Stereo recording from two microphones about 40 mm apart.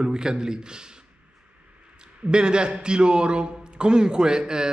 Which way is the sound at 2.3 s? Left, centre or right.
Right.